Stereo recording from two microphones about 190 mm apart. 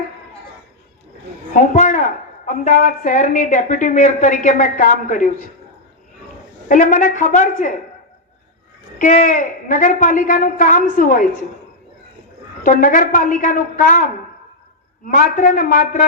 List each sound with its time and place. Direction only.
1.5 s a sound: 40° left (ahead or behind)
2.6 s a woman's voice: 45° left (ahead or behind)
6.7 s a woman's voice: 45° left (ahead or behind)
9.0 s a woman's voice: 45° left (ahead or behind)
12.6 s a woman's voice: 45° left (ahead or behind)
15.0 s a woman's voice: 45° left (ahead or behind)